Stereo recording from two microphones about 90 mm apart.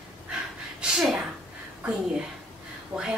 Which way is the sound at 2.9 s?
50° right (ahead or behind).